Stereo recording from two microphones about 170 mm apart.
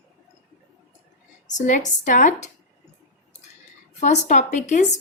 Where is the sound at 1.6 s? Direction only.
45° left (ahead or behind).